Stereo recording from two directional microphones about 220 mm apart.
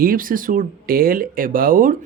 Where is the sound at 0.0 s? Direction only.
40° right (ahead or behind).